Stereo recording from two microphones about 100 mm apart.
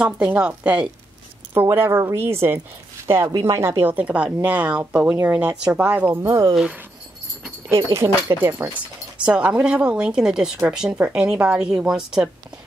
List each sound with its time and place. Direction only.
0.0 s speech: 10° right (ahead or behind)
1.5 s speech: 20° right (ahead or behind)
3.8 s speech: 15° right (ahead or behind)
6.2 s speech: 30° right (ahead or behind)
6.5 s speech: 10° right (ahead or behind)
7.7 s speech: 30° right (ahead or behind)
9.2 s speech: 10° right (ahead or behind)